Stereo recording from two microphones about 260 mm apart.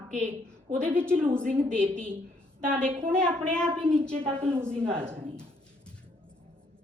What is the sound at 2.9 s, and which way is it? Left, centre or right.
Speech, centre.